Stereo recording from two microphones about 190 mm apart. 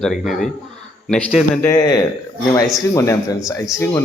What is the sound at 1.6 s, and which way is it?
A man's voice, 20° left (ahead or behind).